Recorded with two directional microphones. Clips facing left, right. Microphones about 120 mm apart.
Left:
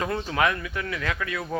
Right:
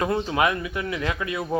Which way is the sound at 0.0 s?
20° right (ahead or behind).